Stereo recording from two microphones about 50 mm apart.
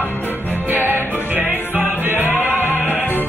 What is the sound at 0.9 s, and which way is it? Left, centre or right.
Music, left.